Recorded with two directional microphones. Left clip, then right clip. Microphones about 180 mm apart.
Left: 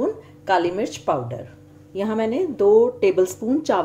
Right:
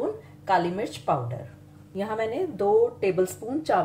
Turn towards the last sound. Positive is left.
turn(degrees=40)  # may be behind; listen again after turning